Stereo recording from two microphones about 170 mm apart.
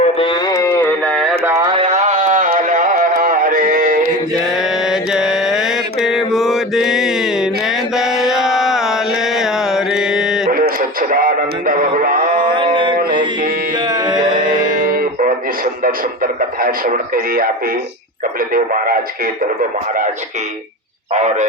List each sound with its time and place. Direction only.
0.0 s carnatic music: 30° left (ahead or behind); by 1.2 s 10° left (ahead or behind)
1.5 s a sound: 20° right (ahead or behind)
1.7 s a sound: 40° right (ahead or behind)
2.6 s music: 50° right (ahead or behind)
4.9 s mantra: centre (ahead or behind)
11.1 s a sound: 55° right (ahead or behind)
12.5 s a sound: 30° right (ahead or behind)
13.9 s music: 25° right (ahead or behind)
14.8 s guitar: 55° right (ahead or behind)
15.8 s radio: 55° right (ahead or behind)
18.5 s speech: 55° right (ahead or behind)
21.1 s speech: 45° right (ahead or behind)